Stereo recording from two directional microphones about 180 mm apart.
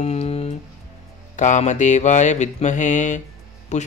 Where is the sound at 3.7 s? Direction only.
40° left (ahead or behind).